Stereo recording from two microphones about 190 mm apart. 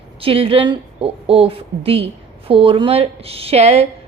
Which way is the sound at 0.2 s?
30° right (ahead or behind).